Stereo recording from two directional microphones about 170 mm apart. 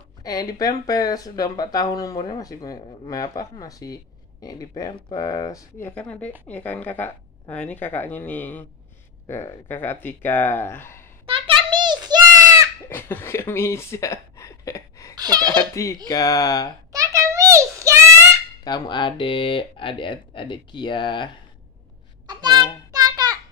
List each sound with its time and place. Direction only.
0.2 s speech: 20° left (ahead or behind)
5.9 s speech: 10° left (ahead or behind)
11.2 s a sound: 35° right (ahead or behind)
12.9 s speech: 15° left (ahead or behind)
15.1 s speech: 25° right (ahead or behind)
15.7 s speech: 20° left (ahead or behind)
16.9 s a sound: 20° right (ahead or behind)
18.6 s speech: 25° left (ahead or behind)
22.2 s a sound: 25° right (ahead or behind)